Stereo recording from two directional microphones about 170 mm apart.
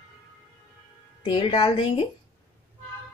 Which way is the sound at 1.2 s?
30° left (ahead or behind).